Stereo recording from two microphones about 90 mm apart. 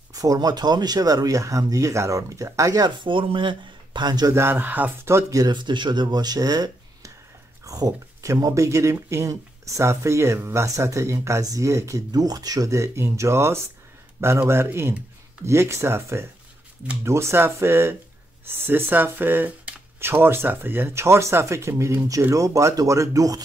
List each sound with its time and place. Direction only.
0.1 s speech: 40° right (ahead or behind)
3.0 s speech: 70° right (ahead or behind); by 4.3 s 50° right (ahead or behind)
4.3 s speech: 25° right (ahead or behind)
5.3 s speech: 50° right (ahead or behind)